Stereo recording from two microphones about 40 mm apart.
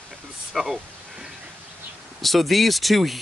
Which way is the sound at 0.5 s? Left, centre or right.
Centre.